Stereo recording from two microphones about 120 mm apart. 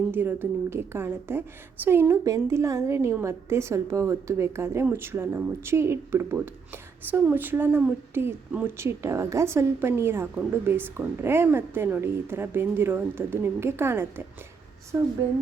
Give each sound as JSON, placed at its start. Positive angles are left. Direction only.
{"t": 0.1, "sound": "speech", "side_deg": -15}